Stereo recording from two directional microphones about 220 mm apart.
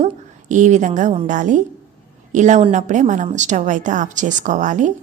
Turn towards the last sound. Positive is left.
turn(degrees=-35)  # may be behind; listen again after turning